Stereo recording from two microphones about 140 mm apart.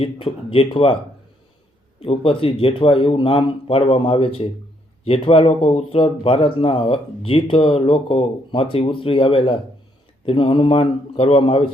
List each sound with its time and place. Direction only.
0.0 s speech: 40° left (ahead or behind)
2.0 s speech: 40° left (ahead or behind)